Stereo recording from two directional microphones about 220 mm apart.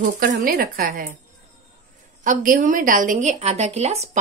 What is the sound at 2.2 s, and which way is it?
A woman's voice, 35° right (ahead or behind).